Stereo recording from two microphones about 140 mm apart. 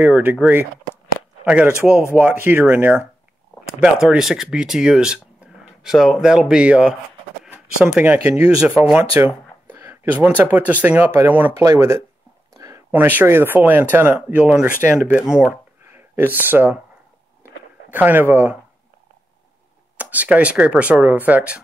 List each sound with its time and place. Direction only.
0.0 s speech: 15° right (ahead or behind)
12.5 s a sound: 25° right (ahead or behind)
12.9 s speech: 10° right (ahead or behind)
17.9 s speech: 15° right (ahead or behind)
20.0 s speech: 10° right (ahead or behind)